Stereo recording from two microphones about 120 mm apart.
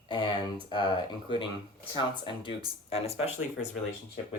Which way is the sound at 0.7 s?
40° left (ahead or behind).